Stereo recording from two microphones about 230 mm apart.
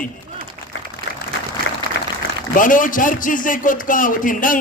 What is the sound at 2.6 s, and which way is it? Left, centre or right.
A man's voice, left.